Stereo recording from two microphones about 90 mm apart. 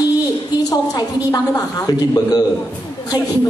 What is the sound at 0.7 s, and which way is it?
A woman's voice, 45° left (ahead or behind).